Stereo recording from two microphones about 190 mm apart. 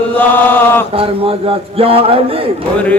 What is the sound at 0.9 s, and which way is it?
A man's voice, 30° right (ahead or behind).